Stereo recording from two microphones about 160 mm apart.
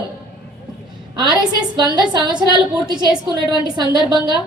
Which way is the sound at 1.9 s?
30° right (ahead or behind).